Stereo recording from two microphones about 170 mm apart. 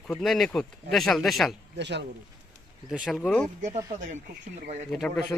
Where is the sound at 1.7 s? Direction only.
90° right.